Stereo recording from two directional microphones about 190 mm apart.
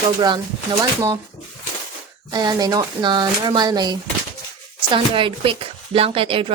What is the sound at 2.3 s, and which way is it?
Speech, 20° right (ahead or behind).